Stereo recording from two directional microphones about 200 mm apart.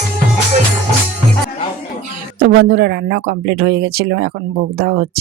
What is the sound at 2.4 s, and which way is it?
Speech, 50° right (ahead or behind).